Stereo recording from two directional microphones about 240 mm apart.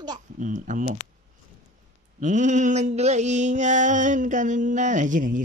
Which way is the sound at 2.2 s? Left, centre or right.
Right.